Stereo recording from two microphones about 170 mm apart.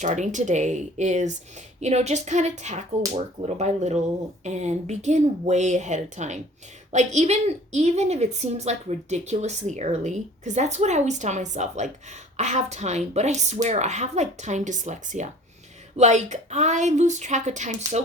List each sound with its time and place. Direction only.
0.0 s a woman's voice: 45° right (ahead or behind)